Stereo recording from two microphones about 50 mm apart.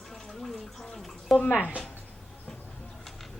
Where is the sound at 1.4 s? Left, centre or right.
Left.